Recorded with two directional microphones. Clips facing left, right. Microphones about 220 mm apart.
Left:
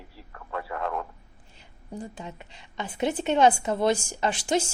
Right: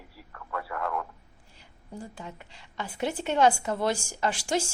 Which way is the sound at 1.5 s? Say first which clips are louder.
Left 4 dB; 20° left (ahead or behind).